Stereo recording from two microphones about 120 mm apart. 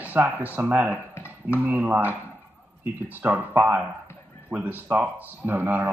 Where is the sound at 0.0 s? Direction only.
15° right (ahead or behind).